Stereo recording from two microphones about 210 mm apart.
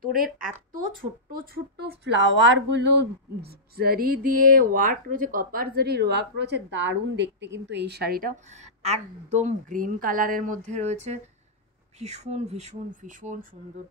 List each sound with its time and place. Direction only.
0.0 s speech: 40° right (ahead or behind)